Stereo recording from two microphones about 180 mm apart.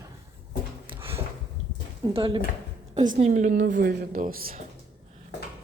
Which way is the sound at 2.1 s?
30° right (ahead or behind).